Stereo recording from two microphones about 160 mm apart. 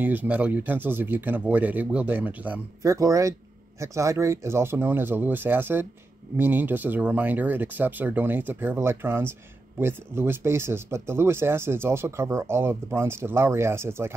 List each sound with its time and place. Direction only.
0.0 s speech: 10° right (ahead or behind)